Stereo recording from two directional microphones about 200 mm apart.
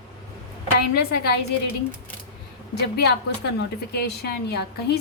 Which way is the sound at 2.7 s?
55° left (ahead or behind).